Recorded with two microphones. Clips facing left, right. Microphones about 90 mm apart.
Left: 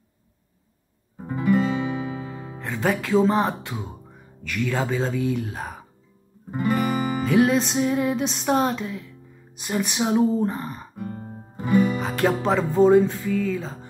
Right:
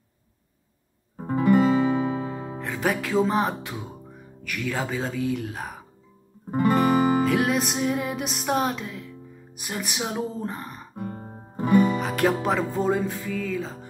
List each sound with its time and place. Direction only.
1.1 s music: 45° right (ahead or behind)
2.6 s music: centre (ahead or behind)
6.5 s music: 50° right (ahead or behind)
7.2 s music: centre (ahead or behind)
11.0 s guitar: 30° right (ahead or behind)
11.5 s music: 40° right (ahead or behind)
12.0 s music: centre (ahead or behind)